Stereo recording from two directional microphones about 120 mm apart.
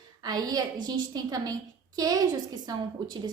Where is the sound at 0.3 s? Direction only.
35° right (ahead or behind).